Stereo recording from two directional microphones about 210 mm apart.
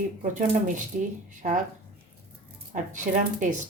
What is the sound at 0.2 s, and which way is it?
Speech, 35° right (ahead or behind).